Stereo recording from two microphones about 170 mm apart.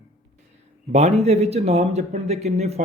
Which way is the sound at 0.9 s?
40° right (ahead or behind).